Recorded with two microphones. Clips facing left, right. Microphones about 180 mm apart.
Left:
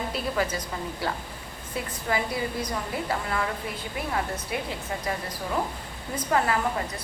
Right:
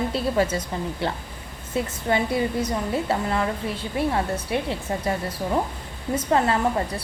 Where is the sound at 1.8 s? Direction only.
25° right (ahead or behind).